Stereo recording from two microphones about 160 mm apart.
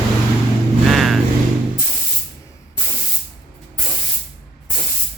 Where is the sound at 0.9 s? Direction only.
Centre (ahead or behind).